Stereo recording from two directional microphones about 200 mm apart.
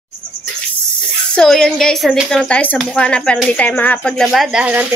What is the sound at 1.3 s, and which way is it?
Speech, centre (ahead or behind).